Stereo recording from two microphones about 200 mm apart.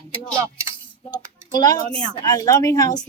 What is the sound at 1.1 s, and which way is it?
A woman's voice, 20° left (ahead or behind).